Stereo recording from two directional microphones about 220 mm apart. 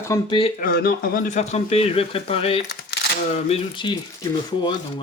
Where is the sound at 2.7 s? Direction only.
50° left (ahead or behind).